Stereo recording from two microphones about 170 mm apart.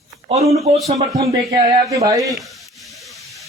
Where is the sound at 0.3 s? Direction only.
40° right (ahead or behind).